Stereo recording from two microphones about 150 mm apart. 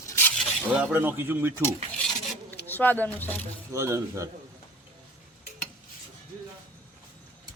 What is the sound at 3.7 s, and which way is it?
Speech, 20° right (ahead or behind).